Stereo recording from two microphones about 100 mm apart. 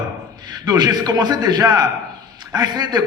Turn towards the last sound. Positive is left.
turn(degrees=-45)  # may be behind; listen again after turning